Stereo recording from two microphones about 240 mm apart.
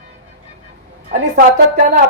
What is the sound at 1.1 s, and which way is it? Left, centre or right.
Speech, right.